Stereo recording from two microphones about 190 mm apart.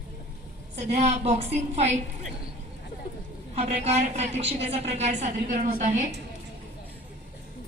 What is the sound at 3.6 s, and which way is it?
A woman's voice, 35° right (ahead or behind).